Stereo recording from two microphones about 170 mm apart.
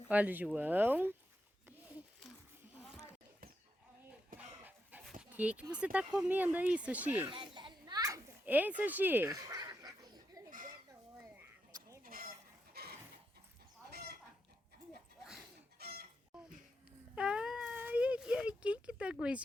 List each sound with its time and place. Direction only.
0.1 s speech: 10° right (ahead or behind)
4.4 s dog: 10° right (ahead or behind)
5.2 s speech: 5° right (ahead or behind)
7.3 s children playing: 30° right (ahead or behind)
12.0 s chicken: 60° right (ahead or behind)
12.7 s a sound: 65° right (ahead or behind)
15.8 s chicken: 65° right (ahead or behind)
17.2 s a sound: 5° right (ahead or behind)